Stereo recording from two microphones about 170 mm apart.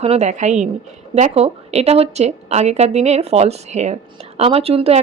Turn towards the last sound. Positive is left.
turn(degrees=-35)  # may be behind; listen again after turning